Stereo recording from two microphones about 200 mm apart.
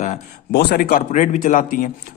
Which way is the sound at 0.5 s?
50° left (ahead or behind).